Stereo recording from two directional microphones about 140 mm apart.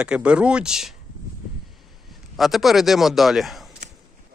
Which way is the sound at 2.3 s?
Centre (ahead or behind).